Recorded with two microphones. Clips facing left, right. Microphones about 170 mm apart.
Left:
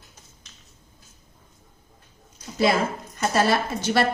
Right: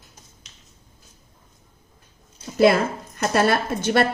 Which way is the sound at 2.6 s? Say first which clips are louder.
Right 5 dB; 60° right (ahead or behind).